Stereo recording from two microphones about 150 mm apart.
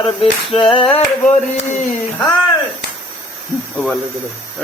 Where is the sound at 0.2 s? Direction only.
35° left (ahead or behind).